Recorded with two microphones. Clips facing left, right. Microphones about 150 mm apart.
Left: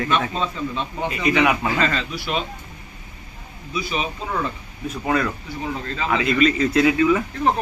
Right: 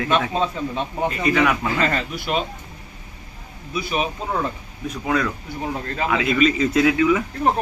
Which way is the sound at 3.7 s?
55° right (ahead or behind).